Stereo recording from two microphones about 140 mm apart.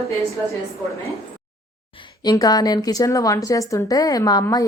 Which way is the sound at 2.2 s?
25° left (ahead or behind).